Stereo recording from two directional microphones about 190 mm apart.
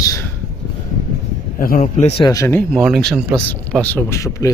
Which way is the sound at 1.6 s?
45° left (ahead or behind).